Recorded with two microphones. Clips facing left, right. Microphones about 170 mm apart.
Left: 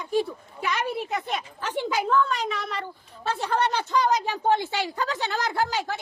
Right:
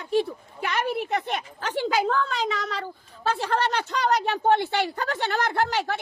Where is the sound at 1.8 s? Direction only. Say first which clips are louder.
Even; 85° right.